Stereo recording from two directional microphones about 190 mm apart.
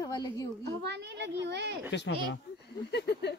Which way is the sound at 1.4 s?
65° right (ahead or behind).